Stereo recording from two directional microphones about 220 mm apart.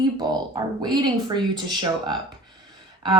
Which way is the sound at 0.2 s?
20° right (ahead or behind).